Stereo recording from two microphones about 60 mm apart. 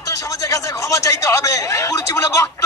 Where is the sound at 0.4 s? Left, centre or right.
Left.